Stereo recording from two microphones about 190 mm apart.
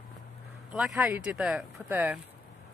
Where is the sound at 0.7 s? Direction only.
5° right (ahead or behind).